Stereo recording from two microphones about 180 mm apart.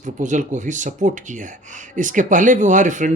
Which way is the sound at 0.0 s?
45° right (ahead or behind).